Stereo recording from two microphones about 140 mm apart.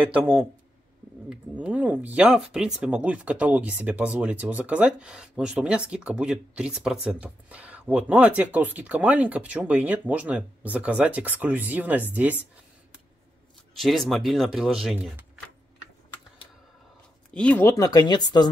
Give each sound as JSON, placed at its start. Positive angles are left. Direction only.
{"t": 0.0, "sound": "speech", "side_deg": -10}
{"t": 13.7, "sound": "speech", "side_deg": 0}
{"t": 17.3, "sound": "speech", "side_deg": 10}
{"t": 17.6, "sound": "speech", "side_deg": 25}